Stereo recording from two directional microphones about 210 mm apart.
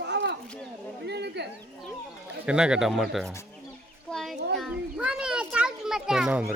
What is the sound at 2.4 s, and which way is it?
Speech, 5° right (ahead or behind).